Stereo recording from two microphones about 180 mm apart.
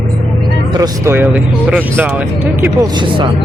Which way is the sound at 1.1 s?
10° right (ahead or behind).